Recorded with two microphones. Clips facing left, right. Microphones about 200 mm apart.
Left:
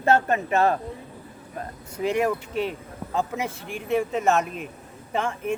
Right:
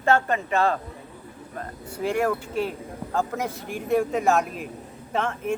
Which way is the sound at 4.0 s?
Centre (ahead or behind).